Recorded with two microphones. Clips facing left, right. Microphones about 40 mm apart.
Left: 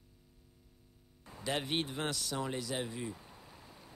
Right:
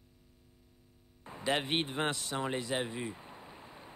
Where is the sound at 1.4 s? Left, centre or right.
Right.